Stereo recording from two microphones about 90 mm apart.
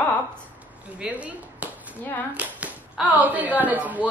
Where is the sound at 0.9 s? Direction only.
10° right (ahead or behind).